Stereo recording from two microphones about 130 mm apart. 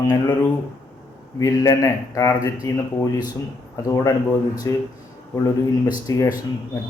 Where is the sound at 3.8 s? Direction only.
30° left (ahead or behind).